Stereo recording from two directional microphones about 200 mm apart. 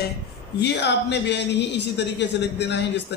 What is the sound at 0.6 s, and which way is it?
Speech, 55° left (ahead or behind).